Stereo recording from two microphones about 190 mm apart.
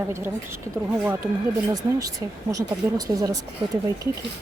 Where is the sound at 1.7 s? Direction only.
20° right (ahead or behind).